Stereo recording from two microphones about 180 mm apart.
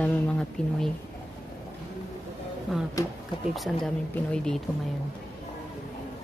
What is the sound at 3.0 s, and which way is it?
Speech, 20° left (ahead or behind).